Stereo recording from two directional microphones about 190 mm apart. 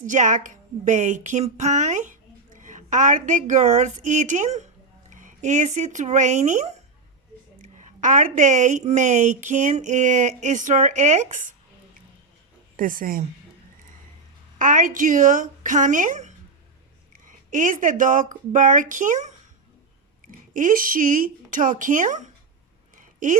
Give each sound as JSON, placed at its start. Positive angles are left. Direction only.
{"t": 0.0, "sound": "a woman's voice", "side_deg": -40}
{"t": 12.7, "sound": "speech", "side_deg": -45}
{"t": 14.6, "sound": "speech", "side_deg": -45}
{"t": 20.5, "sound": "speech", "side_deg": -45}
{"t": 23.0, "sound": "a sound", "side_deg": -40}